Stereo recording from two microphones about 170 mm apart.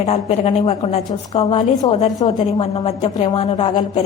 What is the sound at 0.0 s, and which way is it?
A woman's voice, 40° left (ahead or behind).